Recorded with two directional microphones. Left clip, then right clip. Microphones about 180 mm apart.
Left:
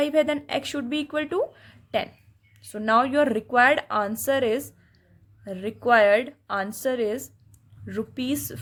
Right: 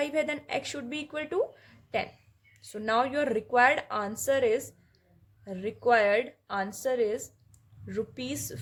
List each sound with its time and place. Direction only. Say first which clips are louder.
0.0 s speech: left 7 dB; 30° left (ahead or behind)